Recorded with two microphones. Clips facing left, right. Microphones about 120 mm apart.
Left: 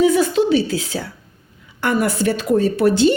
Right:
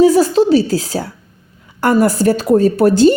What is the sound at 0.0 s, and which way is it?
A woman's voice, 35° right (ahead or behind).